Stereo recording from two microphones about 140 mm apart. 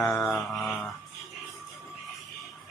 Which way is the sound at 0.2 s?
Centre (ahead or behind).